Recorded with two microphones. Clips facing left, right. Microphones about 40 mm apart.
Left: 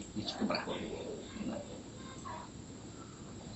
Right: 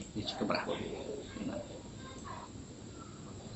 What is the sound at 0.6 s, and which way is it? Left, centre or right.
Speech, centre.